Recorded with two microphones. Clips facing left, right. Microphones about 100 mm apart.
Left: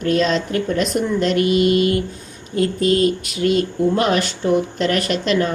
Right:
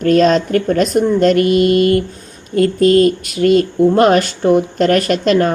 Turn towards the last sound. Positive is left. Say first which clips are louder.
# right 6 dB
turn(degrees=-50)  # may be behind; listen again after turning